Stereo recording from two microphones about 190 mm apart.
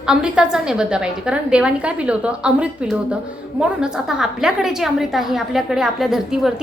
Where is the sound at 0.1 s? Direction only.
5° right (ahead or behind).